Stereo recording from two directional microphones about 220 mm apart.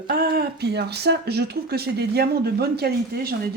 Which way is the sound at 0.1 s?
45° right (ahead or behind).